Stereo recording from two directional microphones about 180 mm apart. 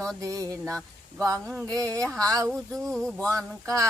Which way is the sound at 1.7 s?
20° right (ahead or behind).